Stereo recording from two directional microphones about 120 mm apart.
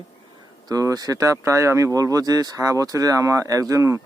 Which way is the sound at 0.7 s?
30° right (ahead or behind).